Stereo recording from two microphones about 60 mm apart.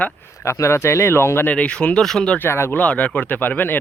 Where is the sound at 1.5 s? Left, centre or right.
Centre.